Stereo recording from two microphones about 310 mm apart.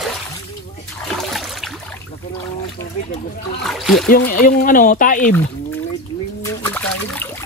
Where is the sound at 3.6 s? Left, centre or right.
Centre.